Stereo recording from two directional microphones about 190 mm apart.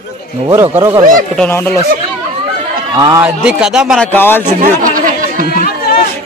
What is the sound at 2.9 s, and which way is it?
Speech, 20° right (ahead or behind).